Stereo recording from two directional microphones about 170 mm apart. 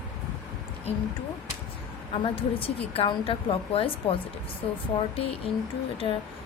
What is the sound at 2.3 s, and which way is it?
Speech, 35° left (ahead or behind).